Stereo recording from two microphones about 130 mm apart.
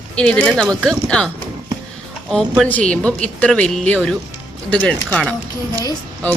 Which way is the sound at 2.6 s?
10° left (ahead or behind).